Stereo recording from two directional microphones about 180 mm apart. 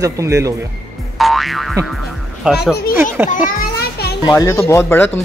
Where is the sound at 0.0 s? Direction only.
15° right (ahead or behind).